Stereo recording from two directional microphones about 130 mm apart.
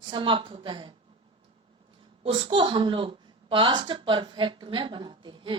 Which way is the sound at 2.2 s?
40° right (ahead or behind).